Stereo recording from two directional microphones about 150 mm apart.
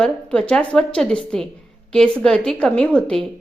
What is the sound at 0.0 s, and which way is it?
A woman's voice, 5° left (ahead or behind).